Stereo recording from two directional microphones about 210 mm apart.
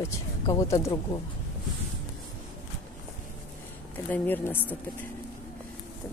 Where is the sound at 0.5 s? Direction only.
15° left (ahead or behind).